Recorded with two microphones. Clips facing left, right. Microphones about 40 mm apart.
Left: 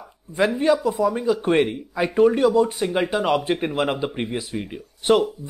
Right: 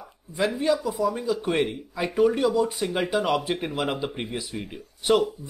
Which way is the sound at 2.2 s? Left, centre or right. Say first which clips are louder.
Left 4 dB; centre.